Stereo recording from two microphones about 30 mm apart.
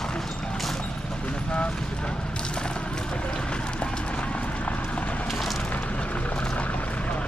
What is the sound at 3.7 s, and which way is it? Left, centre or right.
Clip-clop, left.